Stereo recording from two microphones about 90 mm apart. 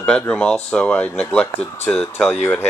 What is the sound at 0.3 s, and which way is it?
Speech, 10° left (ahead or behind).